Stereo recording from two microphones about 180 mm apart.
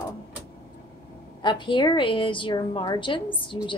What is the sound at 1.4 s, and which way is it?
A woman's voice, 25° left (ahead or behind).